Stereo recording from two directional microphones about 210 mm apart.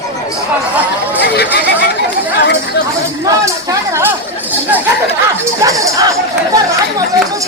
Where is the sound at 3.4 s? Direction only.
10° right (ahead or behind).